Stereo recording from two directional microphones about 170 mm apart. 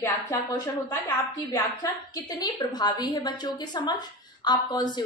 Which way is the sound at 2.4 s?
25° left (ahead or behind).